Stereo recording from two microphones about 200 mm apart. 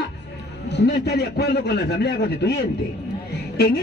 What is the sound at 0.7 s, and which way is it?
Speech, 55° left (ahead or behind).